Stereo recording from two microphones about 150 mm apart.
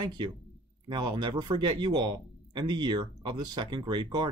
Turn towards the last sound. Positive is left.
turn(degrees=-30)  # may be behind; listen again after turning